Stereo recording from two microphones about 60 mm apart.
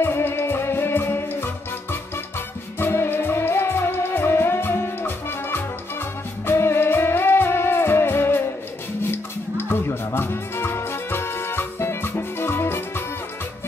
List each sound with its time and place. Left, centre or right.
0.0 s music: left